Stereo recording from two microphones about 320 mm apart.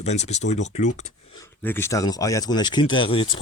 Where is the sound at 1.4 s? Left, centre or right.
Centre.